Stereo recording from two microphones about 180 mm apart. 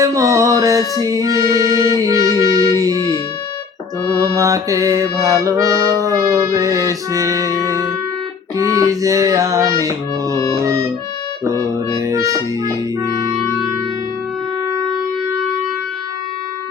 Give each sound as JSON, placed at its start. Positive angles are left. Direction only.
{"t": 0.0, "sound": "music", "side_deg": -20}
{"t": 4.2, "sound": "music", "side_deg": -20}